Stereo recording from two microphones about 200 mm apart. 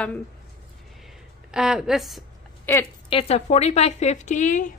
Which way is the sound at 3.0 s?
30° left (ahead or behind).